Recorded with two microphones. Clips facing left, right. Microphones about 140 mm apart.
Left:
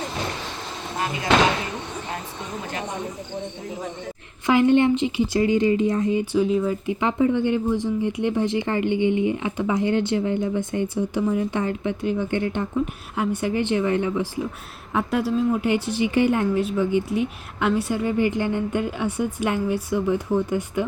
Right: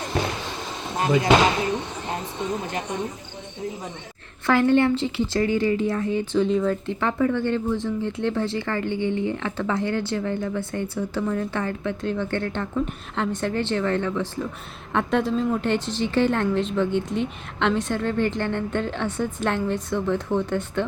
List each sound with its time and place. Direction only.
4.4 s a woman's voice: 15° left (ahead or behind)